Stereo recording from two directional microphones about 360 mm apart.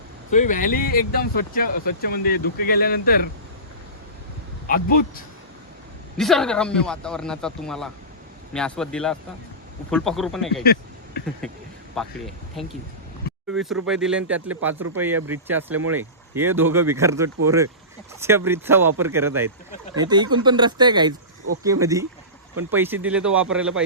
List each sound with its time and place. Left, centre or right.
0.3 s speech: left
4.6 s speech: left
6.1 s speech: centre
10.6 s a sound: left
11.9 s speech: centre
13.7 s speech: centre